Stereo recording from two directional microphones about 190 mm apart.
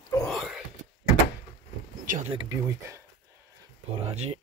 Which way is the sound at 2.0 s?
40° right (ahead or behind).